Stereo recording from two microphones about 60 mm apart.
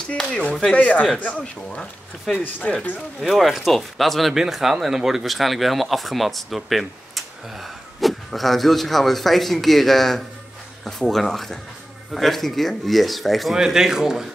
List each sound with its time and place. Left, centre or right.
0.7 s speech: left
1.7 s speech: centre
3.2 s a man's voice: centre